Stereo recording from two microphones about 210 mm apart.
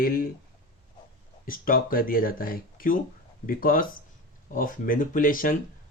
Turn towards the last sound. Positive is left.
turn(degrees=40)  # may be behind; listen again after turning